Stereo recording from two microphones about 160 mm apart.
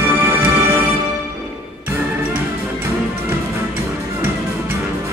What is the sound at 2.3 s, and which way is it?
Music, 10° right (ahead or behind).